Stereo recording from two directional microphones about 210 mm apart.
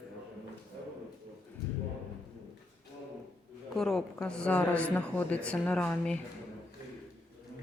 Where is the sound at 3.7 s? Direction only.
Centre (ahead or behind).